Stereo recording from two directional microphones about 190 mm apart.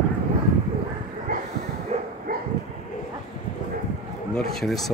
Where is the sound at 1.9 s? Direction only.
35° right (ahead or behind).